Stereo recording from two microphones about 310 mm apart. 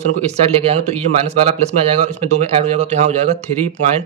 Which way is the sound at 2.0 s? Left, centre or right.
Right.